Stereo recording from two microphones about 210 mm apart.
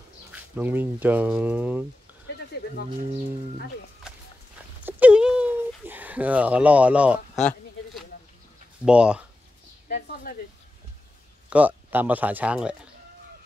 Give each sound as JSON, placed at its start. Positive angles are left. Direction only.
{"t": 0.3, "sound": "speech", "side_deg": -10}
{"t": 4.8, "sound": "a sound", "side_deg": -10}
{"t": 8.8, "sound": "speech", "side_deg": -5}
{"t": 9.8, "sound": "a woman's voice", "side_deg": 40}
{"t": 11.5, "sound": "speech", "side_deg": -10}